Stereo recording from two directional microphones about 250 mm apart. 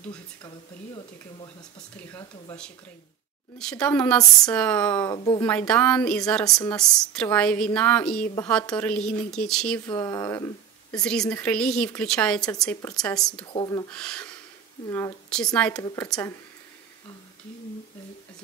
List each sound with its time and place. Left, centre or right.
2.0 s a woman's voice: centre
5.1 s speech: centre
5.4 s a woman's voice: centre
9.8 s a woman's voice: centre
13.4 s speech: centre
13.8 s a woman's voice: centre